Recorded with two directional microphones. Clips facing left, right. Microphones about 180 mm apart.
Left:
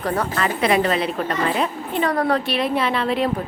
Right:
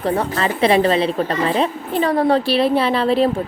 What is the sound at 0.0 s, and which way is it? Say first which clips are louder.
A woman's voice: right 3 dB; 25° right (ahead or behind).